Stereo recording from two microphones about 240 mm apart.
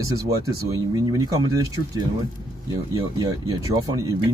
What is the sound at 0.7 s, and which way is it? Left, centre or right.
Speech, centre.